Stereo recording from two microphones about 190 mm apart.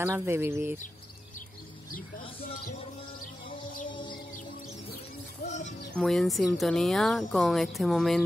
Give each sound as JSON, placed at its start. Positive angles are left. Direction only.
{"t": 0.0, "sound": "speech", "side_deg": -10}
{"t": 3.9, "sound": "music", "side_deg": 25}
{"t": 5.5, "sound": "speech", "side_deg": 40}
{"t": 5.9, "sound": "speech", "side_deg": 0}